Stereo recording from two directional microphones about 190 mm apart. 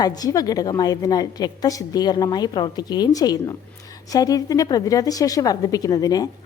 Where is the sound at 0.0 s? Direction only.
20° left (ahead or behind).